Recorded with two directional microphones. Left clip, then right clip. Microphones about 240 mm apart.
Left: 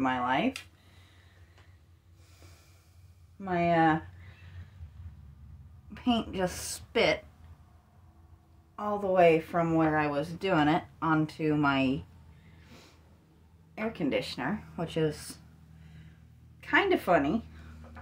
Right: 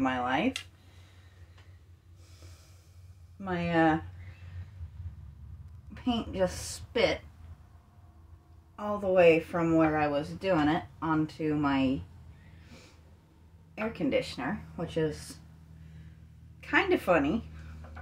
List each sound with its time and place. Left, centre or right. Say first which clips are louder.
0.0 s speech: left 1 dB; centre
3.3 s speech: left 2 dB; centre
5.9 s speech: even; left
8.7 s speech: even; centre
10.5 s speech: left 1 dB; left
13.7 s speech: right 1 dB; left
16.5 s speech: left 1 dB; left